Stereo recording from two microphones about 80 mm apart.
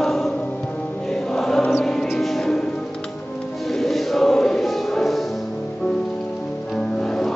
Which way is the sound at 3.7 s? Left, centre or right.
Centre.